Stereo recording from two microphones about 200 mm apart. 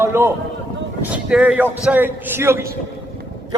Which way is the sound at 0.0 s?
10° right (ahead or behind).